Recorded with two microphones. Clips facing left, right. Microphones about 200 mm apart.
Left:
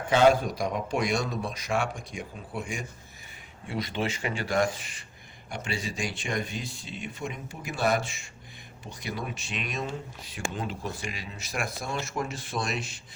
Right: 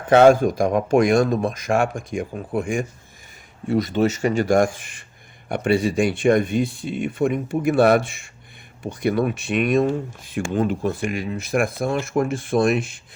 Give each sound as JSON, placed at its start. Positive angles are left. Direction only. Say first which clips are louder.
{"t": 0.1, "sound": "speech", "louder": "right 8 dB", "side_deg": -55}